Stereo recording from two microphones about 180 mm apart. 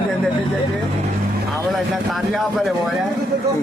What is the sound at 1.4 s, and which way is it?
A man's voice, centre (ahead or behind).